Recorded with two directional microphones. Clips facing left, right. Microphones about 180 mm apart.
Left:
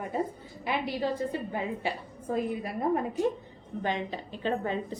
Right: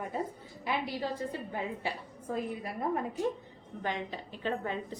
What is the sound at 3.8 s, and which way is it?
A woman's voice, 25° left (ahead or behind).